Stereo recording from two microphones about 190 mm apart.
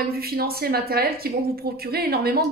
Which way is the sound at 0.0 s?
55° right (ahead or behind).